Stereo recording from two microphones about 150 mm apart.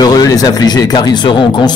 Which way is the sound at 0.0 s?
25° left (ahead or behind).